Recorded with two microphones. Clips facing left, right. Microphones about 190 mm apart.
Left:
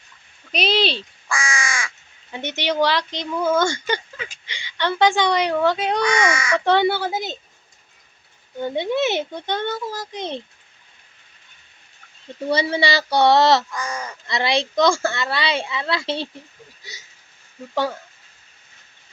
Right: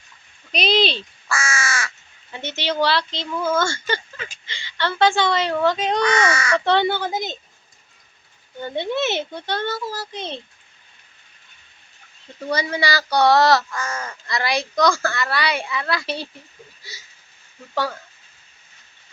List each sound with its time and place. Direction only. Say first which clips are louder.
0.5 s crow: right 1 dB; 10° left (ahead or behind)
2.3 s speech: left 2 dB; 15° left (ahead or behind)
8.6 s speech: left 2 dB; 10° left (ahead or behind)
12.5 s speech: left 3 dB; 25° left (ahead or behind)